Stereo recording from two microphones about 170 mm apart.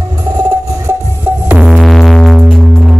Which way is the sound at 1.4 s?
5° right (ahead or behind).